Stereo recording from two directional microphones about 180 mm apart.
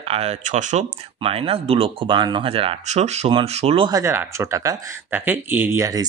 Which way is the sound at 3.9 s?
15° right (ahead or behind).